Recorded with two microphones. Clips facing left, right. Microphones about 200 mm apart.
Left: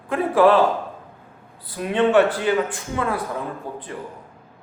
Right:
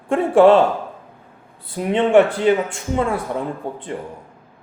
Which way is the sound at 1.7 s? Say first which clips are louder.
Right 3 dB; 20° right (ahead or behind).